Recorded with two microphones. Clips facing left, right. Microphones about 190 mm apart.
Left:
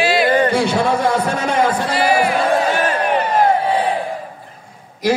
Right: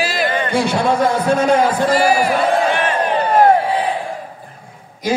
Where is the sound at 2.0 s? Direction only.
40° right (ahead or behind).